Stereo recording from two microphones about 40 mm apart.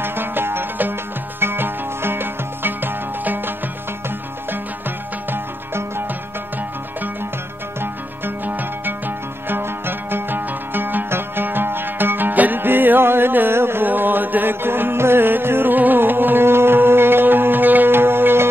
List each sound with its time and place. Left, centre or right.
0.0 s music: right
1.4 s music: right
8.5 s music: right
11.1 s music: right
11.4 s music: right
13.5 s music: right
13.8 s music: right
15.7 s music: right